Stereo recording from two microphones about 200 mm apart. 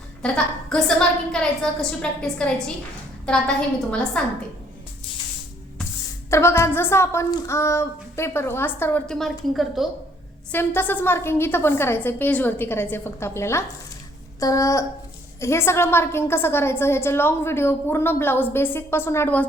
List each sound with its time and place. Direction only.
0.2 s a woman's voice: 5° left (ahead or behind)
4.2 s a woman's voice: 5° left (ahead or behind)
6.3 s a woman's voice: 15° left (ahead or behind)
10.5 s a woman's voice: 10° left (ahead or behind)